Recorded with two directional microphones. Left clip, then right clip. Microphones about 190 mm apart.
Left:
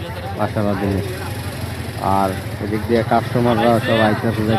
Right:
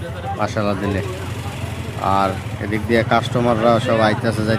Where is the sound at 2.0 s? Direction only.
5° right (ahead or behind).